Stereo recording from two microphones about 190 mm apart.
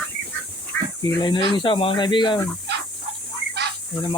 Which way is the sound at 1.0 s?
20° left (ahead or behind).